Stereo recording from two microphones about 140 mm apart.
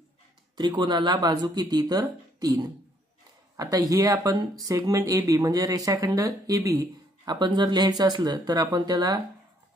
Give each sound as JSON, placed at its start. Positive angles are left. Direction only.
{"t": 0.6, "sound": "speech", "side_deg": -30}